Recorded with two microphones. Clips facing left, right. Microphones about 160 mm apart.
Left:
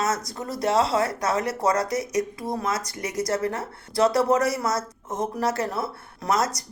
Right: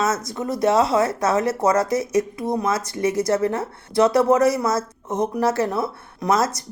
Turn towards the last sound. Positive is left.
turn(degrees=-25)  # may be behind; listen again after turning